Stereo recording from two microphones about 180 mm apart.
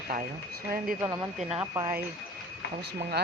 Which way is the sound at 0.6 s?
55° right (ahead or behind).